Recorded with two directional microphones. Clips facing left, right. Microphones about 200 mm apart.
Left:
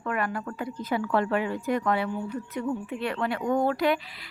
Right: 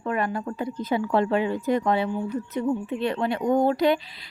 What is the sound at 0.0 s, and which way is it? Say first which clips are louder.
A woman's voice: right 3 dB; 25° right (ahead or behind).